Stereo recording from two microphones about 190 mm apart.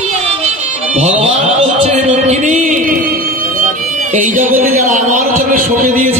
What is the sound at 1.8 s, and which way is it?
Speech, 35° right (ahead or behind).